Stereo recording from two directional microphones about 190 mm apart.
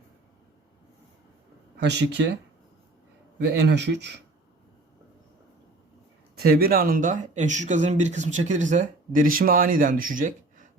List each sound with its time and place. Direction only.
1.8 s speech: 65° right (ahead or behind)
3.4 s speech: 65° right (ahead or behind)
6.3 s speech: 50° right (ahead or behind)